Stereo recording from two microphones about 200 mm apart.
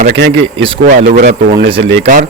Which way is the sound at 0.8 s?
40° right (ahead or behind).